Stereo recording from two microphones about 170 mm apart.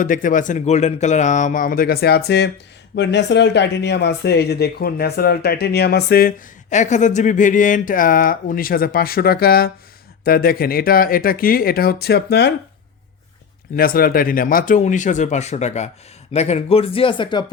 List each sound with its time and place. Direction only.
0.0 s speech: 50° left (ahead or behind); by 2.5 s 75° left (ahead or behind)
2.9 s speech: 90° left; by 6.3 s 65° left (ahead or behind)
6.7 s speech: 45° left (ahead or behind); by 12.5 s 70° left (ahead or behind)
13.7 s speech: 60° left (ahead or behind); by 17.4 s 30° left (ahead or behind)